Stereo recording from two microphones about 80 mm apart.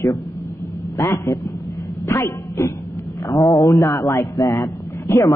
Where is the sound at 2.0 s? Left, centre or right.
Left.